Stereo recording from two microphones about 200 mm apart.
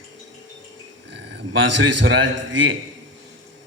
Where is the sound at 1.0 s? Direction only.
60° right (ahead or behind).